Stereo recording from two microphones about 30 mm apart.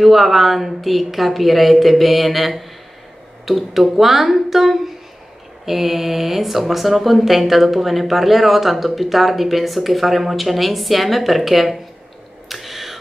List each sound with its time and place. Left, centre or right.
0.0 s speech: centre
5.7 s mantra: centre
6.6 s speech: centre
12.4 s a sound: centre